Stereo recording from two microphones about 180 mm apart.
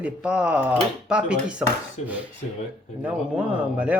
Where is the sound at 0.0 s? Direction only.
5° right (ahead or behind).